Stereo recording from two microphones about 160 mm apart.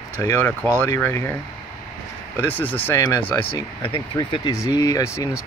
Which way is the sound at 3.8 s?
35° left (ahead or behind).